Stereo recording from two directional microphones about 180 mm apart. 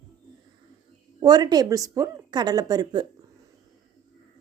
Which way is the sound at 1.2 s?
25° right (ahead or behind).